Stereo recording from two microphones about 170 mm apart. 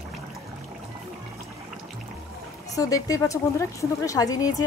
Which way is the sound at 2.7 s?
20° left (ahead or behind).